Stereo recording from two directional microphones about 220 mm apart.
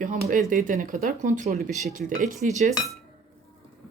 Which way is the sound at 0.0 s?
35° right (ahead or behind).